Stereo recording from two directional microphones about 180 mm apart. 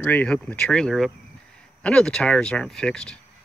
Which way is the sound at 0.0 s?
10° left (ahead or behind).